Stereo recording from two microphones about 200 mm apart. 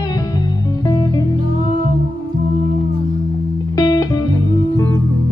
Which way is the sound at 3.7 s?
20° left (ahead or behind).